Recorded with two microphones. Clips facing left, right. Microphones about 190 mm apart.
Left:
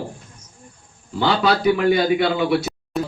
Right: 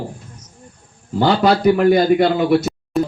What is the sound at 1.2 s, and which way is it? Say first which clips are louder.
A man's voice: right 4 dB; 45° right (ahead or behind).